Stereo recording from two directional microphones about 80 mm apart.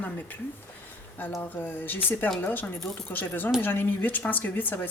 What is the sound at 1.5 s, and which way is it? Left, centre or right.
Speech, left.